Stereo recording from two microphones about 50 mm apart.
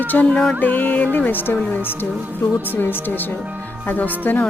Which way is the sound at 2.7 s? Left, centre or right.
Left.